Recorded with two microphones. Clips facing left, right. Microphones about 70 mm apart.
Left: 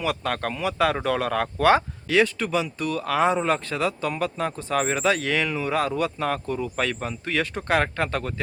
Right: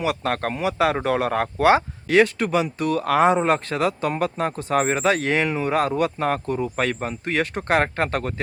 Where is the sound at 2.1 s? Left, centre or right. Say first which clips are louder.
Right 4 dB; right.